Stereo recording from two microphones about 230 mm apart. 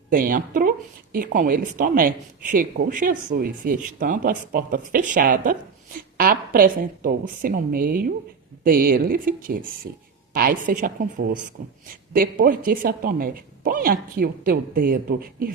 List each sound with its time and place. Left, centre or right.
0.1 s a woman's voice: right